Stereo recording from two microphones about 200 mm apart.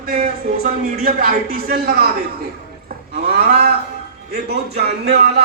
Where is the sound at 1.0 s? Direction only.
45° right (ahead or behind).